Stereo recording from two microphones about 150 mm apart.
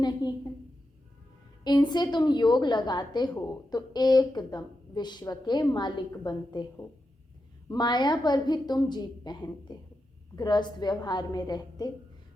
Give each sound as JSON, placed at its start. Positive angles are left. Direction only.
{"t": 0.0, "sound": "a woman's voice", "side_deg": 25}
{"t": 1.6, "sound": "a woman's voice", "side_deg": 30}